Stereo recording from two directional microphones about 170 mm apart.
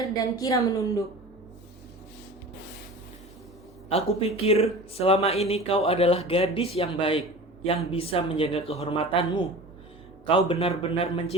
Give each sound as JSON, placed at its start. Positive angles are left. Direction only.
{"t": 0.0, "sound": "a woman's voice", "side_deg": 20}
{"t": 3.8, "sound": "speech", "side_deg": 35}
{"t": 10.2, "sound": "speech", "side_deg": 30}